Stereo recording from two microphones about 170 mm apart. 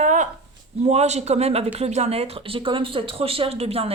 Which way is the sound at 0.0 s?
45° right (ahead or behind).